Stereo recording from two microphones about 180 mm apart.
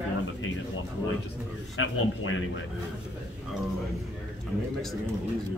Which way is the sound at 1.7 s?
90° left.